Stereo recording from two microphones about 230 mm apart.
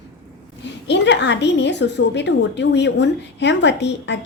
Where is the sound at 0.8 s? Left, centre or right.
Left.